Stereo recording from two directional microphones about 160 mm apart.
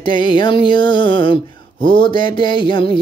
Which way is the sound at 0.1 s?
30° left (ahead or behind).